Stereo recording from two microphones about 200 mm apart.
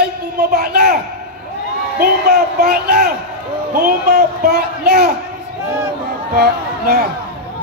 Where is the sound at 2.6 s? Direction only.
50° right (ahead or behind).